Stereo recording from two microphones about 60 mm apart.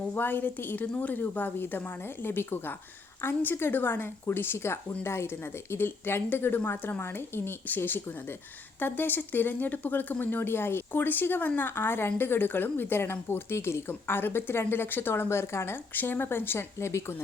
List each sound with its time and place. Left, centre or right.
0.1 s speech: left
16.7 s speech: left